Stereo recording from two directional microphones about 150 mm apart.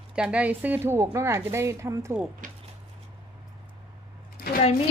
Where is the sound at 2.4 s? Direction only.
65° right (ahead or behind).